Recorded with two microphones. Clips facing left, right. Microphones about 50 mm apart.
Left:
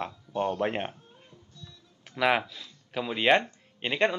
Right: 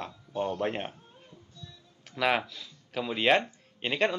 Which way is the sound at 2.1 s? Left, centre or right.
Centre.